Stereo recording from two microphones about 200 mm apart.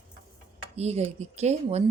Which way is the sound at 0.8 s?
30° right (ahead or behind).